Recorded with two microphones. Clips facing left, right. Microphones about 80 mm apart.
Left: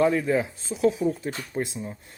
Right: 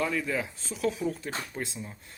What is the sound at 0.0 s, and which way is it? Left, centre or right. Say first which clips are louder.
Speech: left 8 dB; left.